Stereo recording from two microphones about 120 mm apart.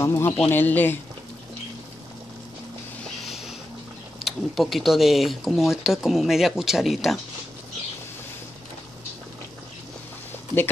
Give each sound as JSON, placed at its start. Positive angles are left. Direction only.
{"t": 0.0, "sound": "speech", "side_deg": 20}
{"t": 3.3, "sound": "a sound", "side_deg": 0}
{"t": 4.2, "sound": "speech", "side_deg": 0}